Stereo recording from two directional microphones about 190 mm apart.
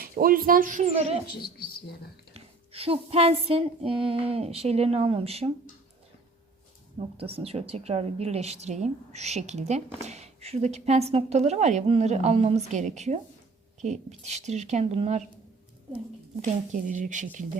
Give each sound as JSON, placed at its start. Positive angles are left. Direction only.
{"t": 0.0, "sound": "speech", "side_deg": -50}
{"t": 1.5, "sound": "a sound", "side_deg": 55}
{"t": 2.3, "sound": "a woman's voice", "side_deg": -30}
{"t": 7.2, "sound": "a woman's voice", "side_deg": -30}
{"t": 16.9, "sound": "a woman's voice", "side_deg": -40}